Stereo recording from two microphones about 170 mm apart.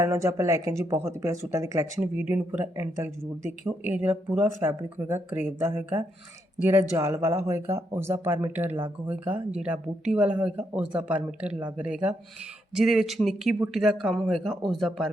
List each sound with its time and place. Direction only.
0.0 s speech: 15° right (ahead or behind); by 15.1 s centre (ahead or behind)